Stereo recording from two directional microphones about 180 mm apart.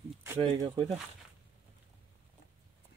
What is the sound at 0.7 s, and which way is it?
Speech, 30° right (ahead or behind).